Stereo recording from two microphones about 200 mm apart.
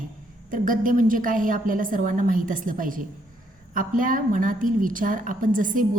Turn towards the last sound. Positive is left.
turn(degrees=-40)  # may be behind; listen again after turning